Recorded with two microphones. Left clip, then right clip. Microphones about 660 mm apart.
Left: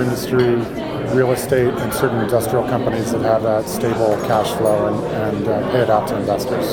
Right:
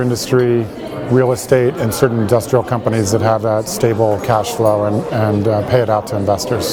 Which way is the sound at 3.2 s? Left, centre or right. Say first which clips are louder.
Left 2 dB; right.